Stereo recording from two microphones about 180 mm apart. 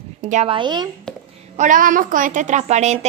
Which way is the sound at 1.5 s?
45° right (ahead or behind).